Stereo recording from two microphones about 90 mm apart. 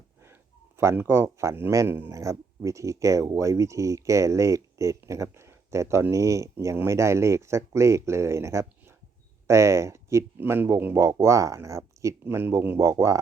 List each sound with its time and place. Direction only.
0.8 s speech: 30° right (ahead or behind)